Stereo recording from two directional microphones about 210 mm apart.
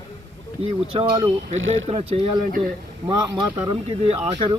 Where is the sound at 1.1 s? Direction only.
25° right (ahead or behind).